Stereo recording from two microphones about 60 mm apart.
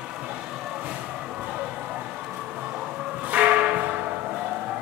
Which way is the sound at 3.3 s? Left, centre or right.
Right.